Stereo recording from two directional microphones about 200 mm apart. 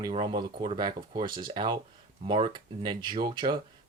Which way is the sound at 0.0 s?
25° right (ahead or behind).